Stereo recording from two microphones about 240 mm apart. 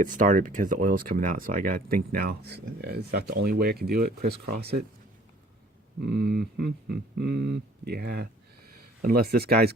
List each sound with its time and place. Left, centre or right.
0.0 s speech: right
6.0 s speech: right